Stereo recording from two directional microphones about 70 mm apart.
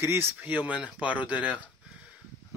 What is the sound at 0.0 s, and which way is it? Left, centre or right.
Speech, right.